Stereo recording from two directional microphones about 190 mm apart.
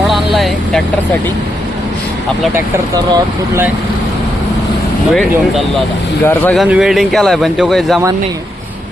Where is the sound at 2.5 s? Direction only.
15° right (ahead or behind).